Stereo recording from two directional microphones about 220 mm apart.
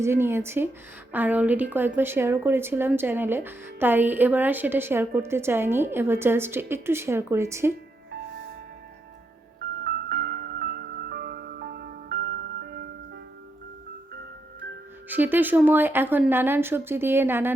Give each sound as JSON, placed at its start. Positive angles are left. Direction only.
{"t": 0.0, "sound": "speech", "side_deg": -10}
{"t": 9.8, "sound": "music", "side_deg": -45}
{"t": 15.1, "sound": "speech", "side_deg": -10}